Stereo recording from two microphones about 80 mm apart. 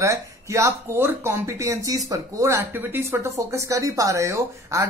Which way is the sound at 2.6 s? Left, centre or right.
Right.